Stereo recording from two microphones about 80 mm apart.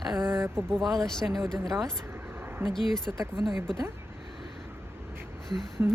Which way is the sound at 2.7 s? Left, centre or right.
Centre.